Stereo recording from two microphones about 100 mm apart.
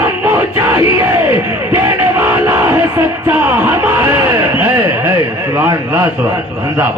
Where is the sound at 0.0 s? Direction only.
20° right (ahead or behind).